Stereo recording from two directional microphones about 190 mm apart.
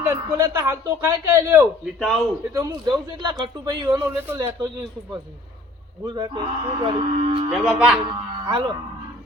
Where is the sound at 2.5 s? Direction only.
15° right (ahead or behind).